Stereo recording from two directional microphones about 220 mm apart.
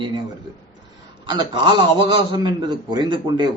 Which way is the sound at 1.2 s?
20° right (ahead or behind).